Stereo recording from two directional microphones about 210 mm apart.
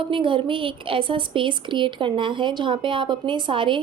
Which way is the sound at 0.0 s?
25° right (ahead or behind).